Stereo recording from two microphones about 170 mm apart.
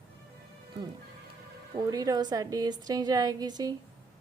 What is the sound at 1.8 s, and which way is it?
A woman's voice, 25° right (ahead or behind).